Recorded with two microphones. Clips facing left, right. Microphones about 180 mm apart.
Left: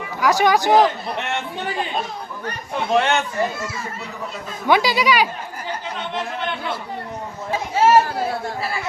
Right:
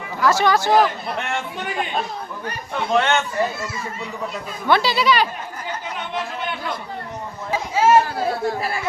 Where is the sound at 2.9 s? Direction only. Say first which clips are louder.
Even; 15° left (ahead or behind).